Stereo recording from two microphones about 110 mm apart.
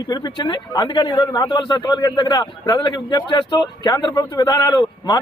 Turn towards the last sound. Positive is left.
turn(degrees=35)  # may be behind; listen again after turning